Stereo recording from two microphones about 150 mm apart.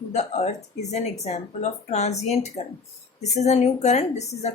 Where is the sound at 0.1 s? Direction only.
50° left (ahead or behind).